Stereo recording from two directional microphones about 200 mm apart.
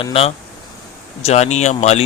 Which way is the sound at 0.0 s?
30° left (ahead or behind).